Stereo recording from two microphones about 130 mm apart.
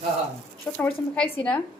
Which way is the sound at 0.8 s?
10° left (ahead or behind).